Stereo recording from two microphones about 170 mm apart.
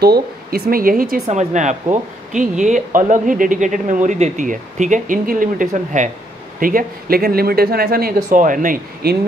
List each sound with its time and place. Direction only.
0.0 s speech: 65° right (ahead or behind)
1.3 s speech: 45° right (ahead or behind)